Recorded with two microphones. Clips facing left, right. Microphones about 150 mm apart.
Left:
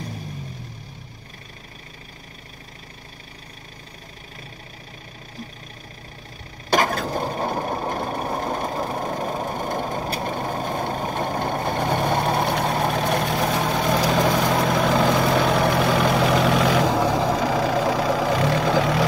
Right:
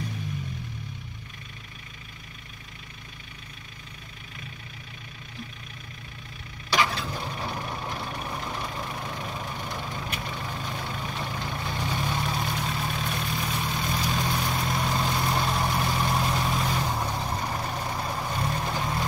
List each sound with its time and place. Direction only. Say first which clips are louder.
6.7 s vehicle: left 6 dB; 50° left (ahead or behind); by 19.0 s 90° left